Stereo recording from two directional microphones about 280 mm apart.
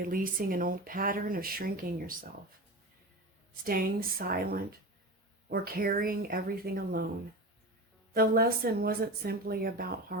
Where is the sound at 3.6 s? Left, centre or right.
Right.